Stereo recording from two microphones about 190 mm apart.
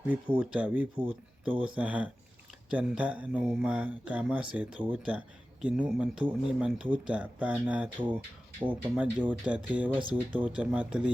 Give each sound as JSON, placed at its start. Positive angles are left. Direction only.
{"t": 0.3, "sound": "speech", "side_deg": -5}